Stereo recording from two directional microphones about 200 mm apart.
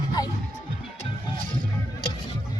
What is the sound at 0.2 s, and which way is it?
Music, 20° left (ahead or behind).